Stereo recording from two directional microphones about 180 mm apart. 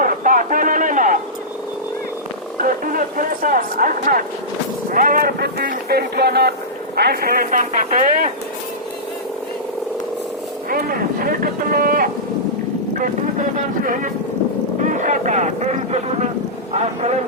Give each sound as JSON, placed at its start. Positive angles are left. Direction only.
{"t": 0.0, "sound": "a sound", "side_deg": -50}
{"t": 2.6, "sound": "speech", "side_deg": -50}
{"t": 10.7, "sound": "speech", "side_deg": -55}
{"t": 14.8, "sound": "speech", "side_deg": -45}